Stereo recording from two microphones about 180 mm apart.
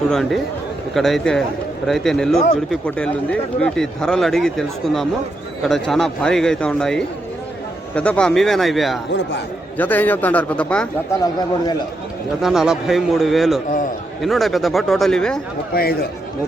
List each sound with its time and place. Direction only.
0.1 s a man's voice: centre (ahead or behind)
12.4 s speech: centre (ahead or behind)
15.7 s speech: 55° left (ahead or behind)